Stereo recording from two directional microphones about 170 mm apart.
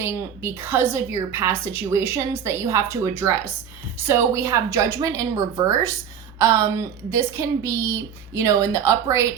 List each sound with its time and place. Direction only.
0.0 s a woman's voice: 15° right (ahead or behind)